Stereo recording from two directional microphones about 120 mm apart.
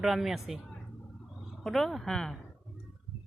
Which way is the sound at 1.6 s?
Centre (ahead or behind).